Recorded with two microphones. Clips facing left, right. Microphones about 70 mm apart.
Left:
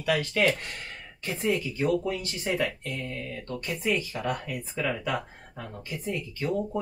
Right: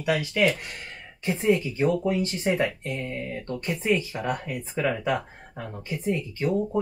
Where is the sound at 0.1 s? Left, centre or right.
Centre.